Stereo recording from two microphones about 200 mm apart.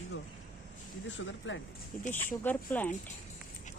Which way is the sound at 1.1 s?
70° left (ahead or behind).